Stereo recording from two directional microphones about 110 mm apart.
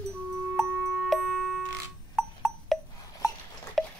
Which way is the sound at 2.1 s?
Centre (ahead or behind).